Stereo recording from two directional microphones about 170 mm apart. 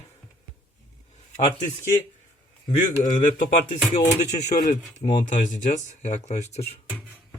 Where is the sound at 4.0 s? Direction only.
45° left (ahead or behind).